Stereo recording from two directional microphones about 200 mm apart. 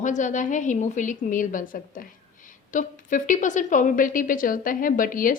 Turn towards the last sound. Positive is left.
turn(degrees=45)  # may be behind; listen again after turning